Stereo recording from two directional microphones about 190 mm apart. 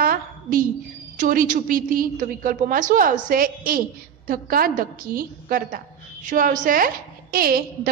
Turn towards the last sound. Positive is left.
turn(degrees=-50)  # may be behind; listen again after turning